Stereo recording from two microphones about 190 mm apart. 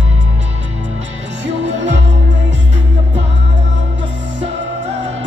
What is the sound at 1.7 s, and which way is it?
Music, 70° right (ahead or behind).